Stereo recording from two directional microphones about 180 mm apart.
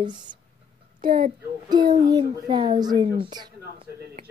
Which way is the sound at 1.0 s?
50° right (ahead or behind).